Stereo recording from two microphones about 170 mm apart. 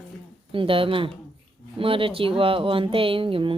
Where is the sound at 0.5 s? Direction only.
30° right (ahead or behind).